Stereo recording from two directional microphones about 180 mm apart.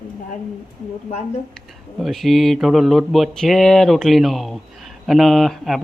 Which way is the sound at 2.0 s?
Centre (ahead or behind).